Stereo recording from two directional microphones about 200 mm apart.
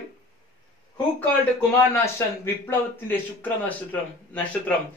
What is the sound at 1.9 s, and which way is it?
A man's voice, 10° left (ahead or behind).